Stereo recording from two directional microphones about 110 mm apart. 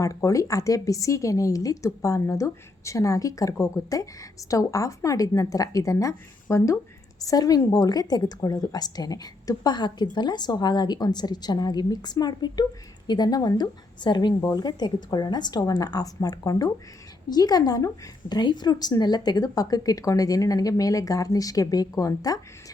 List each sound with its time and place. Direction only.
0.0 s speech: 30° left (ahead or behind)